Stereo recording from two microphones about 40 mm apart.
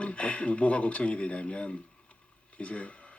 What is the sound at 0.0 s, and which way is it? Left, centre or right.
Speech, left.